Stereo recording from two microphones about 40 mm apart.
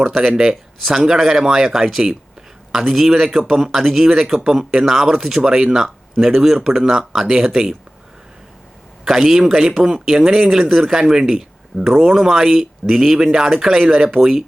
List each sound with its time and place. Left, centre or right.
0.0 s a man's voice: centre
0.3 s speech: centre
2.9 s a man's voice: centre
9.0 s speech: centre